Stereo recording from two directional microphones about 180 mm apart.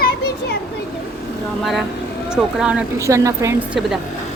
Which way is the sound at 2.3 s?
5° right (ahead or behind).